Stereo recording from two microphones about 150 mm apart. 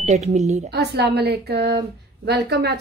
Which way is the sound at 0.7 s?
90° right.